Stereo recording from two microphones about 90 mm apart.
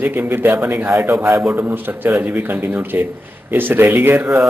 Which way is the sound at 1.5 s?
25° right (ahead or behind).